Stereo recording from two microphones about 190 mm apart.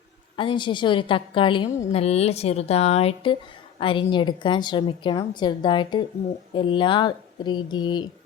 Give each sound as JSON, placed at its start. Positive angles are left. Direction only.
{"t": 0.3, "sound": "a woman's voice", "side_deg": 25}